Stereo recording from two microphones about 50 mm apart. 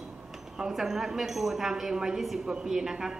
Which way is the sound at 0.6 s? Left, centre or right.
Centre.